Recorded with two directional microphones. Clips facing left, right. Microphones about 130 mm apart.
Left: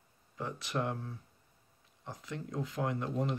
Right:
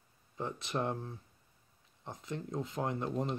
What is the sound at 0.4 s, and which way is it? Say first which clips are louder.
Speech: even; 25° right (ahead or behind).